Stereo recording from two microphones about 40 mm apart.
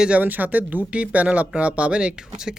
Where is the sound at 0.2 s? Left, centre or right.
Right.